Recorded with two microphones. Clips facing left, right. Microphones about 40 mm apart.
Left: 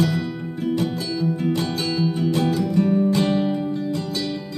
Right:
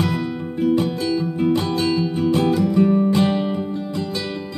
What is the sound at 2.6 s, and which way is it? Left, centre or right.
Music, centre.